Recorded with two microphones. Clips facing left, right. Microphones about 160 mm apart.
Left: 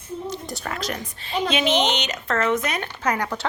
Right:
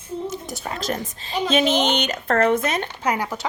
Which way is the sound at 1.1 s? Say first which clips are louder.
Right 3 dB; 40° right (ahead or behind).